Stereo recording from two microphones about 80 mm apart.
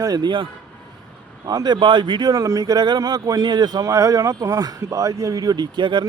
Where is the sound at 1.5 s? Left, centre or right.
Right.